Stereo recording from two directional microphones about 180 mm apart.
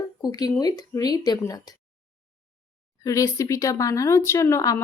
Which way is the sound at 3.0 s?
20° left (ahead or behind).